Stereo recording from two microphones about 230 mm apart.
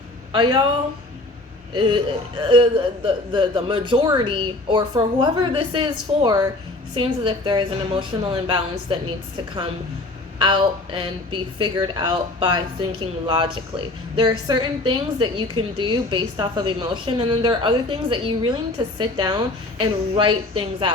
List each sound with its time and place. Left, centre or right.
0.3 s speech: centre
1.7 s speech: right
10.3 s speech: right